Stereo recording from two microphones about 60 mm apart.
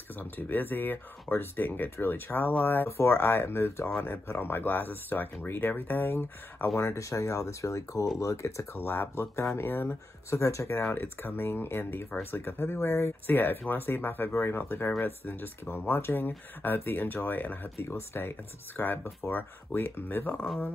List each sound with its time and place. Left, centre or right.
0.1 s speech: left
8.8 s speech: left
10.3 s speech: left
10.9 s speech: left
17.8 s speech: left